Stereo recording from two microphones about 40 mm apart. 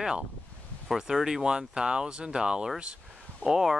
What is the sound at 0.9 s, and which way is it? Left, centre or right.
Speech, centre.